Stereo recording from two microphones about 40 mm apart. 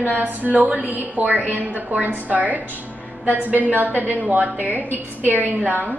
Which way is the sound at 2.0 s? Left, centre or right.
Right.